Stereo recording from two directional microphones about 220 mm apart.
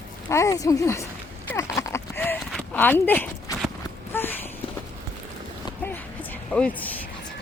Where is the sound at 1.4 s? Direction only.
15° left (ahead or behind).